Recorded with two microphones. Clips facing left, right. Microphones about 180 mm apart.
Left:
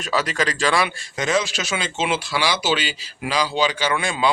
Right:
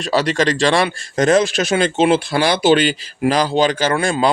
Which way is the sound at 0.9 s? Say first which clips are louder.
Right 9 dB; 45° right (ahead or behind).